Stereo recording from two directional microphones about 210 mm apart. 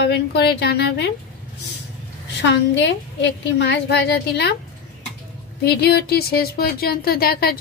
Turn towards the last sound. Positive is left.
turn(degrees=45)  # may be behind; listen again after turning